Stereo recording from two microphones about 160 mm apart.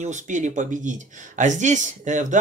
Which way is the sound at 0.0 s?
50° right (ahead or behind).